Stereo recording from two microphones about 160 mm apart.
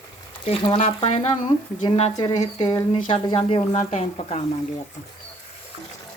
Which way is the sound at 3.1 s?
35° left (ahead or behind).